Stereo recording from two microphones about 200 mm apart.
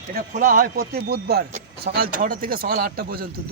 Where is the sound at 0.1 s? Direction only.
45° right (ahead or behind).